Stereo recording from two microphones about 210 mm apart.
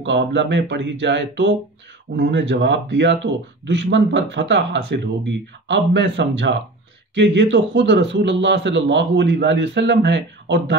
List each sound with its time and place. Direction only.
0.0 s a man's voice: 60° right (ahead or behind)